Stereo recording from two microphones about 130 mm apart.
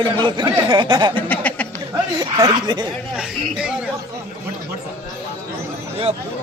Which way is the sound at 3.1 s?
5° right (ahead or behind).